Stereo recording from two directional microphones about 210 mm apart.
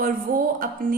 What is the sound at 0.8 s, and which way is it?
Speech, 45° right (ahead or behind).